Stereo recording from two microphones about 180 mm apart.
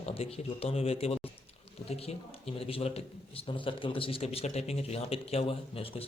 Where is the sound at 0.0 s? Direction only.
35° left (ahead or behind).